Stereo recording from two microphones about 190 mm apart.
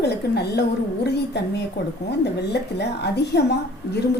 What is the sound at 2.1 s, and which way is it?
A woman's voice, 60° left (ahead or behind).